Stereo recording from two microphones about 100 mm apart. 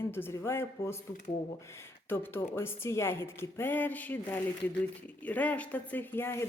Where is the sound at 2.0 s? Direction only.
25° left (ahead or behind).